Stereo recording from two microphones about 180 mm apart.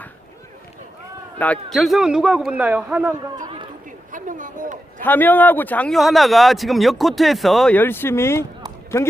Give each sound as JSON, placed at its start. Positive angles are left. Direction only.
{"t": 1.4, "sound": "speech", "side_deg": 5}
{"t": 4.1, "sound": "a sound", "side_deg": -45}
{"t": 5.0, "sound": "speech", "side_deg": 10}